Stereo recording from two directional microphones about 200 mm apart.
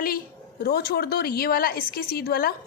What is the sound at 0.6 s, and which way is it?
A woman's voice, 50° left (ahead or behind).